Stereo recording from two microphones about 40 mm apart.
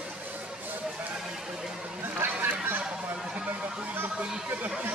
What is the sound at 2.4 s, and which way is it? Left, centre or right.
Honk, right.